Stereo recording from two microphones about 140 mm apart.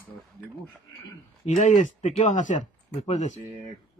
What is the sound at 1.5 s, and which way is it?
Speech, 60° left (ahead or behind).